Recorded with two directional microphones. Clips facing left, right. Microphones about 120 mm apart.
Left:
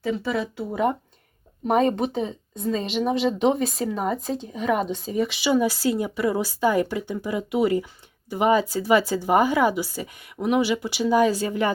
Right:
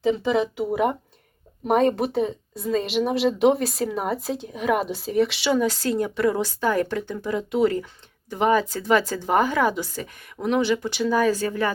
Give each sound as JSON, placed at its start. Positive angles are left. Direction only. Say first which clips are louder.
{"t": 0.0, "sound": "speech", "louder": "right 4 dB", "side_deg": -20}